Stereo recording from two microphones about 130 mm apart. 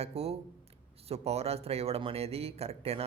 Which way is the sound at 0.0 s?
50° right (ahead or behind).